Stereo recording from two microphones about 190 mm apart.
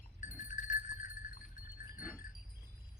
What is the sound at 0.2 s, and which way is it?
Goat, 40° left (ahead or behind).